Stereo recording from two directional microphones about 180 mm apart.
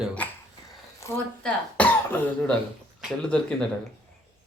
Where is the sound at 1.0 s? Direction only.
15° left (ahead or behind).